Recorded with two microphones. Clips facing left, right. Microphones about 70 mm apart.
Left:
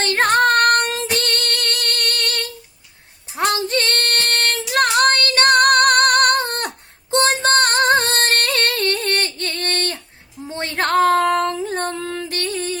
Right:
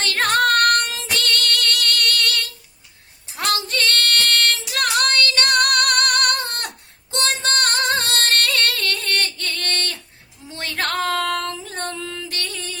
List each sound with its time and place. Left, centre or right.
0.0 s female singing: left
1.1 s music: left
3.3 s female singing: left
10.4 s a sound: left
11.5 s music: left